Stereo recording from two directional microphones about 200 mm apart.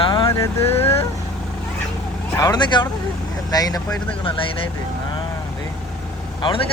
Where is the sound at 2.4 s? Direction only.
20° left (ahead or behind).